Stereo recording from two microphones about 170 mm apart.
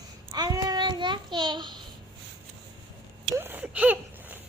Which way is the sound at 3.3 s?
10° right (ahead or behind).